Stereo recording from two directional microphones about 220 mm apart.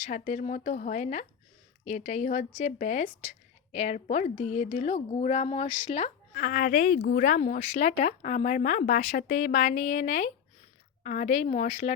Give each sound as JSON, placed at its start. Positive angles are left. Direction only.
{"t": 0.0, "sound": "a woman's voice", "side_deg": 35}
{"t": 6.3, "sound": "speech", "side_deg": 40}